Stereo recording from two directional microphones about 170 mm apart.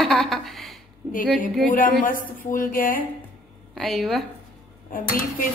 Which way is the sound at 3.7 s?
Centre (ahead or behind).